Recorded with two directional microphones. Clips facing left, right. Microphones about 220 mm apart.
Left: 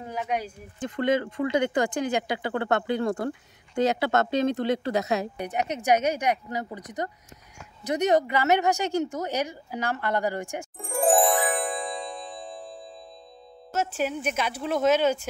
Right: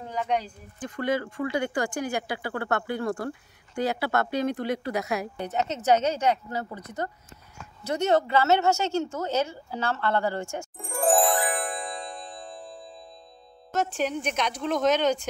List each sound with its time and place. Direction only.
0.1 s speech: 10° left (ahead or behind)
0.7 s speech: 25° left (ahead or behind)
10.8 s music: centre (ahead or behind)
13.7 s speech: 5° left (ahead or behind)